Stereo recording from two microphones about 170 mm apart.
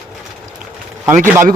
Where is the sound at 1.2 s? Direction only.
15° right (ahead or behind).